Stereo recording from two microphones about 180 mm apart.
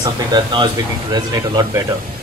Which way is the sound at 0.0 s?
25° right (ahead or behind).